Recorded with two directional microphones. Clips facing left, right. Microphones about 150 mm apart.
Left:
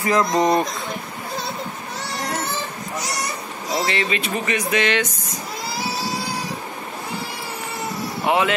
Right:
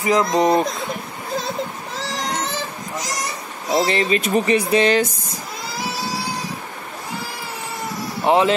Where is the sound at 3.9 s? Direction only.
35° right (ahead or behind).